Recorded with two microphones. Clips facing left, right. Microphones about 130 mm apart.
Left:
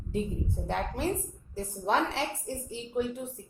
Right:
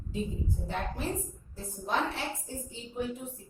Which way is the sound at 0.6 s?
80° left.